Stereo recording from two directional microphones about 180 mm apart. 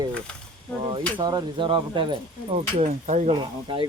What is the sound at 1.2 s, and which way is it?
Speech, 25° right (ahead or behind).